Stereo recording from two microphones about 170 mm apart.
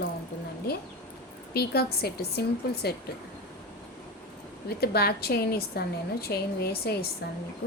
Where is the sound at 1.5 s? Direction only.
70° left (ahead or behind).